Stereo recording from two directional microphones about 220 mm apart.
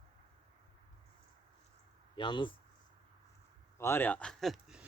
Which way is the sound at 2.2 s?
20° left (ahead or behind).